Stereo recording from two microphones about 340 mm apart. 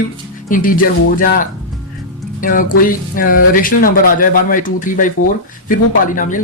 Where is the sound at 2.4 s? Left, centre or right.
Left.